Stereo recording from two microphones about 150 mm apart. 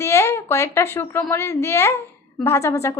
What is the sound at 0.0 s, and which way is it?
A woman's voice, 20° left (ahead or behind).